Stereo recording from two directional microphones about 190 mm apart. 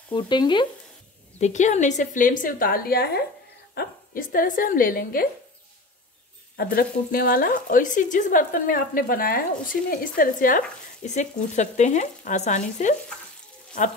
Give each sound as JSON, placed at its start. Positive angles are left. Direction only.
{"t": 0.1, "sound": "frying", "side_deg": 25}
{"t": 1.4, "sound": "a woman's voice", "side_deg": 40}
{"t": 6.5, "sound": "a woman's voice", "side_deg": 55}
{"t": 11.1, "sound": "frying", "side_deg": 40}